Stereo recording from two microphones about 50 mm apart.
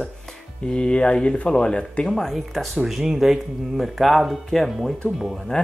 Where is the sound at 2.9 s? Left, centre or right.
Centre.